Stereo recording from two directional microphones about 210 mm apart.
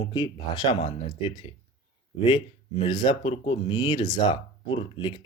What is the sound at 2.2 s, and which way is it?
Speech, 25° left (ahead or behind).